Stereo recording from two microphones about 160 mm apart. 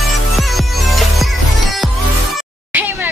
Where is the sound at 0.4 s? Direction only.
Centre (ahead or behind).